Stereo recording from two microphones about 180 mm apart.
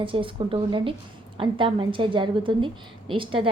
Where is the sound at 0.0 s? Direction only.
30° right (ahead or behind).